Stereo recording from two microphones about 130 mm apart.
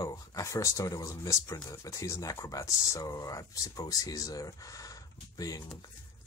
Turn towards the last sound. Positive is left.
turn(degrees=30)  # may be behind; listen again after turning